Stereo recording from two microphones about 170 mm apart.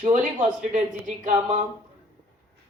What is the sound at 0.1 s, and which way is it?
Speech, 45° right (ahead or behind).